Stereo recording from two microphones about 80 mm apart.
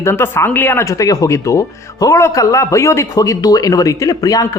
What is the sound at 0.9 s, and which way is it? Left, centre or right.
Speech, left.